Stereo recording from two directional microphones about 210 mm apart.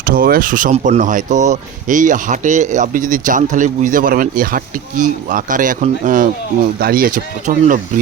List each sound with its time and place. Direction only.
0.0 s speech: 45° right (ahead or behind)